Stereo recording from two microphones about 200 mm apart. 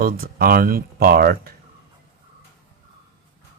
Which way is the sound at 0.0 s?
45° right (ahead or behind).